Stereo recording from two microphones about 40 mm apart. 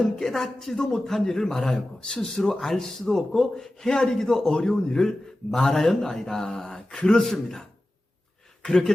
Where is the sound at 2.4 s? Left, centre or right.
Centre.